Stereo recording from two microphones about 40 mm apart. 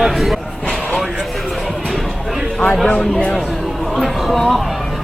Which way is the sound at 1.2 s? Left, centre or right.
Centre.